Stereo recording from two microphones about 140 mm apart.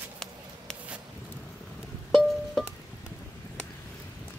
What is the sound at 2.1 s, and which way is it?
Music, centre (ahead or behind).